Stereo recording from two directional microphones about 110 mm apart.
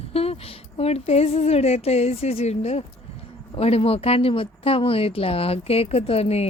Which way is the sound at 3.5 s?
60° left (ahead or behind).